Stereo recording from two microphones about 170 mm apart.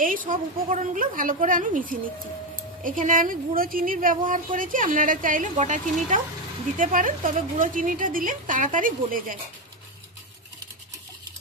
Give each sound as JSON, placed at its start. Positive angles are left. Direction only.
{"t": 0.0, "sound": "a woman's voice", "side_deg": -55}